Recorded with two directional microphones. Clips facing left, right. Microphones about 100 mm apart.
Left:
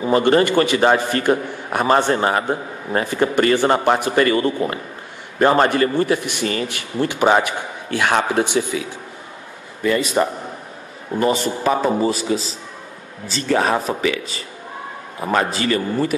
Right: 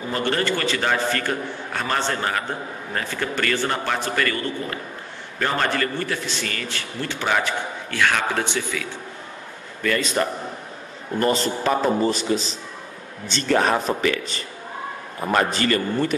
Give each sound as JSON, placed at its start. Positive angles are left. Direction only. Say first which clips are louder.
{"t": 0.1, "sound": "a man's voice", "louder": "left 9 dB", "side_deg": 20}
{"t": 9.8, "sound": "a man's voice", "louder": "left 4 dB", "side_deg": 15}